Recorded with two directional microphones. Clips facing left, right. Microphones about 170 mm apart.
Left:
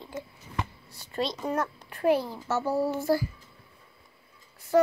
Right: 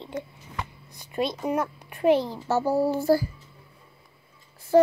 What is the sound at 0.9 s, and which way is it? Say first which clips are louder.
A child's voice: right 5 dB; 15° right (ahead or behind).